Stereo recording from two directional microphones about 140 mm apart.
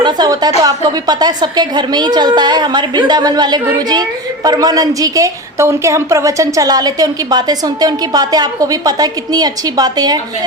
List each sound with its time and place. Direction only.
0.0 s a woman's voice: 30° right (ahead or behind)